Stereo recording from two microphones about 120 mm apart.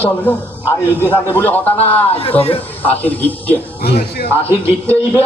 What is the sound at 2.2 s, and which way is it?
Speech, 55° left (ahead or behind).